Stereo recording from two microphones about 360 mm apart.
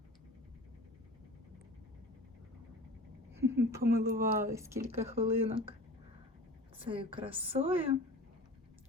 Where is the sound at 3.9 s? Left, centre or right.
Centre.